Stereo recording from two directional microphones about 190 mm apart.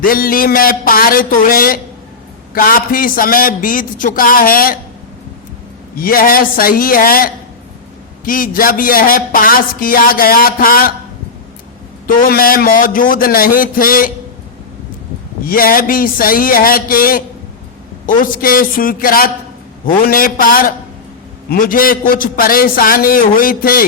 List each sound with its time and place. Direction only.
0.0 s speech: 50° left (ahead or behind)
6.0 s speech: 50° left (ahead or behind)
12.0 s speech: 50° left (ahead or behind)
15.4 s speech: 50° left (ahead or behind)